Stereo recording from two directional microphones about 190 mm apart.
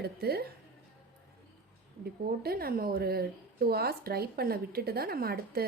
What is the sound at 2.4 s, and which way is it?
A woman's voice, 55° right (ahead or behind).